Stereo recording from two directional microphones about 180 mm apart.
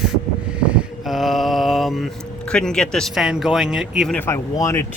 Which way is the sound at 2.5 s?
5° left (ahead or behind).